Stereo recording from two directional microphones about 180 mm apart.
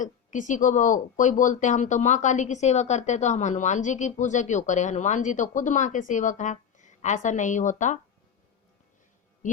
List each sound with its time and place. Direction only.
0.0 s speech: 45° left (ahead or behind)
9.4 s speech: 45° left (ahead or behind)